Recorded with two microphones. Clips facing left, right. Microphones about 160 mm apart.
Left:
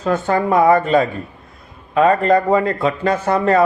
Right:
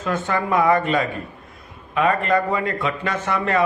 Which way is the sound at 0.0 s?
35° left (ahead or behind).